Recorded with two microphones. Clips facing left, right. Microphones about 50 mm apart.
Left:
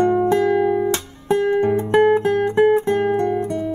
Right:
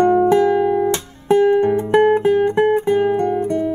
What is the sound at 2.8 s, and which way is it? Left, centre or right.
Music, centre.